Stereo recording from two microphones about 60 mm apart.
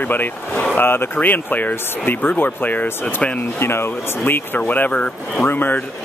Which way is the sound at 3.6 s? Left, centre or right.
Left.